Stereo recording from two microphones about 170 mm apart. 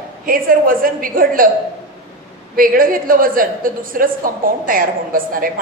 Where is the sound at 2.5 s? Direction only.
55° right (ahead or behind).